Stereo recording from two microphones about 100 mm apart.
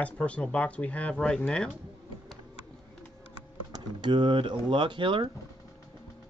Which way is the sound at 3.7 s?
50° right (ahead or behind).